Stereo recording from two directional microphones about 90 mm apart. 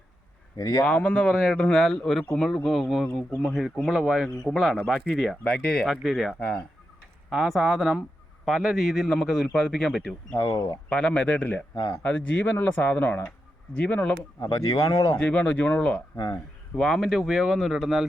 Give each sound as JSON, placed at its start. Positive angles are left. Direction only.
{"t": 0.5, "sound": "speech", "side_deg": 45}
{"t": 0.9, "sound": "a man's voice", "side_deg": 10}
{"t": 5.4, "sound": "a man's voice", "side_deg": 10}
{"t": 5.9, "sound": "a man's voice", "side_deg": 0}
{"t": 10.8, "sound": "a man's voice", "side_deg": 15}
{"t": 14.4, "sound": "speech", "side_deg": 40}
{"t": 15.2, "sound": "a man's voice", "side_deg": 15}
{"t": 16.7, "sound": "a man's voice", "side_deg": 5}